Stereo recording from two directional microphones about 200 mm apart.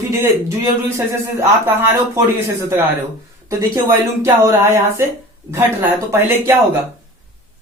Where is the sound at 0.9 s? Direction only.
10° right (ahead or behind).